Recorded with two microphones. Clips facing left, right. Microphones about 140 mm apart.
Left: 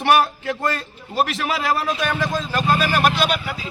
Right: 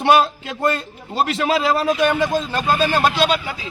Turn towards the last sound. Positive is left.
turn(degrees=-25)  # may be behind; listen again after turning